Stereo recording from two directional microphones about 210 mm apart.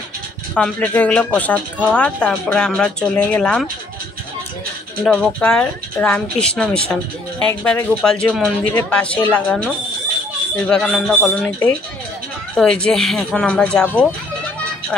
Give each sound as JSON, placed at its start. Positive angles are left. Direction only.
{"t": 0.6, "sound": "speech", "side_deg": 5}
{"t": 5.0, "sound": "speech", "side_deg": 5}